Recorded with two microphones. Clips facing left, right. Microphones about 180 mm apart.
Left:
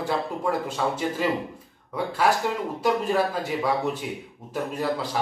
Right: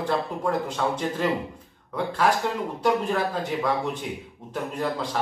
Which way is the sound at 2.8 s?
10° left (ahead or behind).